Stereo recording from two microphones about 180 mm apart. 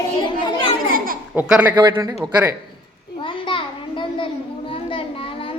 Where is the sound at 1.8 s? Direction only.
20° right (ahead or behind).